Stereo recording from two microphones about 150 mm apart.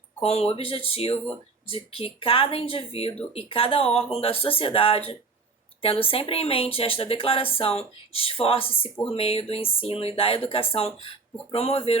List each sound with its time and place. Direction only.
0.2 s speech: 45° left (ahead or behind)